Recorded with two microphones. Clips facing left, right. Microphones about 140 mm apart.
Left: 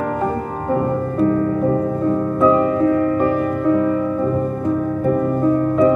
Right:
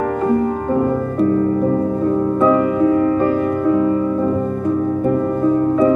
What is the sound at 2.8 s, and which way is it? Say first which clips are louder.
Music: right 2 dB; 20° right (ahead or behind).